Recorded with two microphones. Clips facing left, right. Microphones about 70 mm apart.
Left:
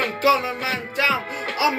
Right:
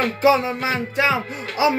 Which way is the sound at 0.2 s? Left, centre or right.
Right.